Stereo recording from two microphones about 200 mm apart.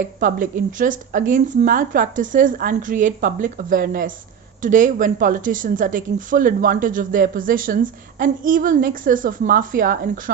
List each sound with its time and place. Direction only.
0.2 s a woman's voice: 40° right (ahead or behind)